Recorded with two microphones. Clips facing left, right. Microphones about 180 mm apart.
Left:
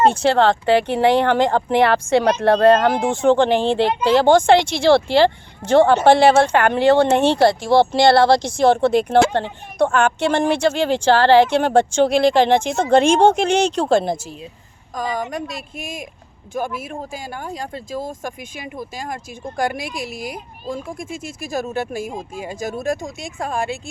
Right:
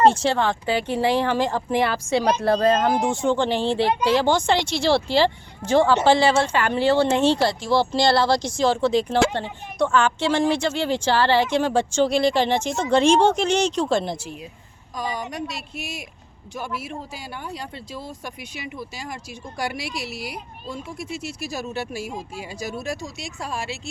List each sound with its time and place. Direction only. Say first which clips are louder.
0.1 s speech: left 6 dB; 60° left (ahead or behind)